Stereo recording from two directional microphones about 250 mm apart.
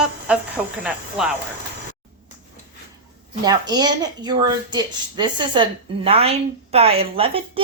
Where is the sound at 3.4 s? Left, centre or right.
Centre.